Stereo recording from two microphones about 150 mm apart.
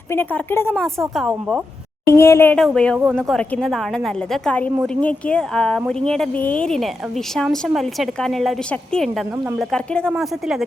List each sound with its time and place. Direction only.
0.1 s a woman's voice: 10° left (ahead or behind)
2.0 s speech: 20° left (ahead or behind)
2.7 s a woman's voice: 5° left (ahead or behind)